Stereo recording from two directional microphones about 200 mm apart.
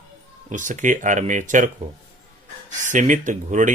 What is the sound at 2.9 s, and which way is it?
Speech, 40° right (ahead or behind).